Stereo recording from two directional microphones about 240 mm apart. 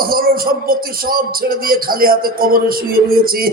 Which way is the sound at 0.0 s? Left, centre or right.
Right.